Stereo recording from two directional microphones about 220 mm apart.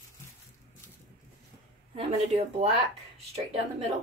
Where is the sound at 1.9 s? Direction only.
30° right (ahead or behind).